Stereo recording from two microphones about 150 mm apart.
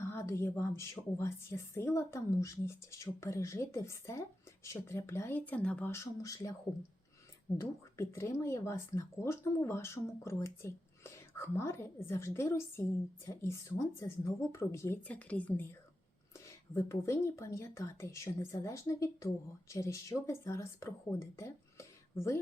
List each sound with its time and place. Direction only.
0.0 s speech: 20° left (ahead or behind)
7.6 s speech: 20° left (ahead or behind)
16.7 s speech: 20° left (ahead or behind)